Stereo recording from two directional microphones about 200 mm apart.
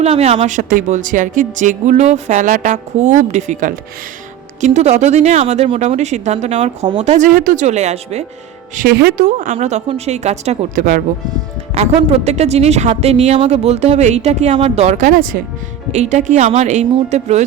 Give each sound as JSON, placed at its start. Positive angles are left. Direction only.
{"t": 0.0, "sound": "a woman's voice", "side_deg": -30}
{"t": 8.7, "sound": "a woman's voice", "side_deg": -50}
{"t": 11.7, "sound": "a woman's voice", "side_deg": -30}